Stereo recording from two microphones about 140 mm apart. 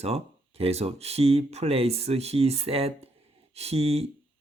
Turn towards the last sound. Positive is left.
turn(degrees=-45)  # may be behind; listen again after turning